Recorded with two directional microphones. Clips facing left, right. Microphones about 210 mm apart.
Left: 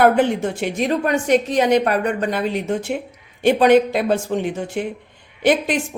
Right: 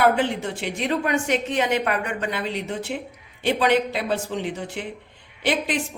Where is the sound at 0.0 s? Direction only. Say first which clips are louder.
Left 5 dB; 50° left (ahead or behind).